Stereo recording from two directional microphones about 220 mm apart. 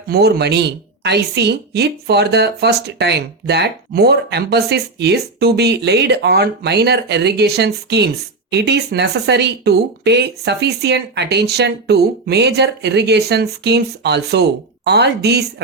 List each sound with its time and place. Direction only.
0.1 s a woman's voice: 45° right (ahead or behind)